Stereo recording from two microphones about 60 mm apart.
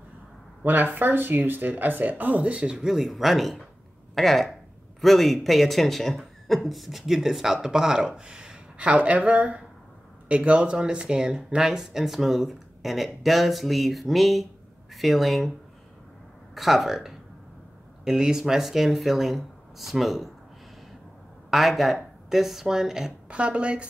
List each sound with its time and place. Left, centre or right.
0.7 s speech: right; by 15.5 s centre
16.5 s speech: centre
21.5 s speech: centre
23.3 s speech: centre